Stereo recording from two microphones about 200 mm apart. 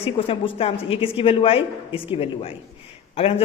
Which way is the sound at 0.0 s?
30° left (ahead or behind).